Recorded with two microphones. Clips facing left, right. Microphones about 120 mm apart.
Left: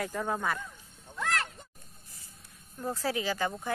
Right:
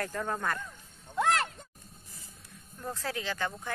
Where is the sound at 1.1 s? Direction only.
25° right (ahead or behind).